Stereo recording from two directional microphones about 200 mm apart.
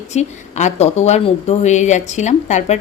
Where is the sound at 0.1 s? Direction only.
35° left (ahead or behind).